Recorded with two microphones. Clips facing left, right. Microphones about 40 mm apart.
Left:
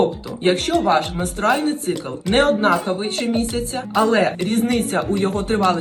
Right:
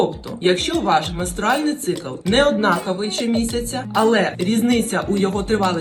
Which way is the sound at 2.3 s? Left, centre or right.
Right.